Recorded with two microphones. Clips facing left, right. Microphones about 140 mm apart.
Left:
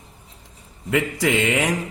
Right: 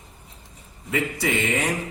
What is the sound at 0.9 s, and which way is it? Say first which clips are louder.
Speech: left 4 dB; 90° left.